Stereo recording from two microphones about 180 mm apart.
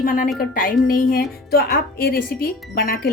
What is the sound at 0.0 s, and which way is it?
A woman's voice, 50° left (ahead or behind).